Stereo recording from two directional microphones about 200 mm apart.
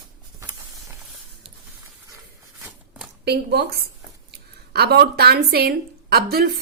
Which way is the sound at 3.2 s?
55° right (ahead or behind).